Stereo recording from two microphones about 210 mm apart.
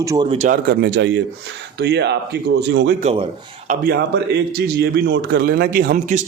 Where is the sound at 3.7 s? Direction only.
45° right (ahead or behind).